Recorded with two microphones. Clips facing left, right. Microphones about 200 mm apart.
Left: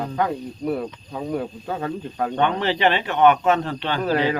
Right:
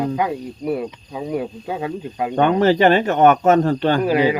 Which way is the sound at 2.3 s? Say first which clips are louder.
Right 8 dB; 45° right (ahead or behind).